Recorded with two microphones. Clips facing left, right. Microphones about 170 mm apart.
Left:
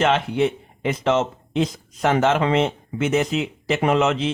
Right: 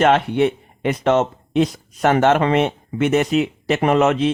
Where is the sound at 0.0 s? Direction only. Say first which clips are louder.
Right 4 dB; 60° right (ahead or behind).